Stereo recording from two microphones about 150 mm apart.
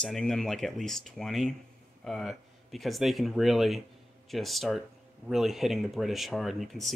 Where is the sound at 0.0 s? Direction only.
5° left (ahead or behind).